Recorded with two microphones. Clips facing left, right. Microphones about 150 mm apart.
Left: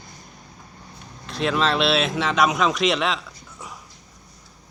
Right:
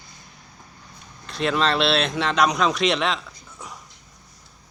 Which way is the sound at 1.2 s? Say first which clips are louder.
Even; centre (ahead or behind).